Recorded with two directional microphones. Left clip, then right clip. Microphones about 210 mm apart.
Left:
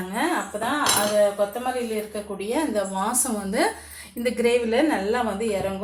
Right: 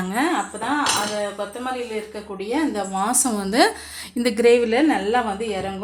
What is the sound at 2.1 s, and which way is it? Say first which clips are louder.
Speech: right 1 dB; 30° right (ahead or behind).